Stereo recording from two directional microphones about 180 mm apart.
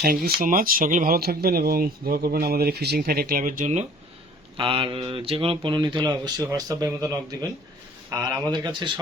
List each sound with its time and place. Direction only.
0.0 s speech: 55° right (ahead or behind)
4.5 s speech: 30° right (ahead or behind)